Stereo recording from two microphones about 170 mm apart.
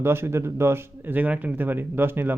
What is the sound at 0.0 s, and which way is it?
Speech, 15° right (ahead or behind).